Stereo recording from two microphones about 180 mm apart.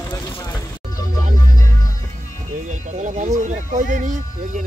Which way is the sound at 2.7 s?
45° right (ahead or behind).